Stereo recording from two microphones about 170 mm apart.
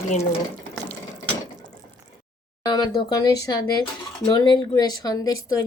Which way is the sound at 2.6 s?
25° left (ahead or behind).